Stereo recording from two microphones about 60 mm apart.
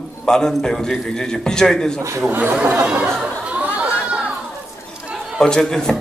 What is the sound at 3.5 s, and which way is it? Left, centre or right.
Chatter, right.